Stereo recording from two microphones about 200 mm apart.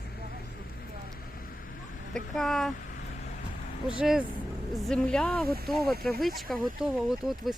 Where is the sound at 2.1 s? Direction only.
Centre (ahead or behind).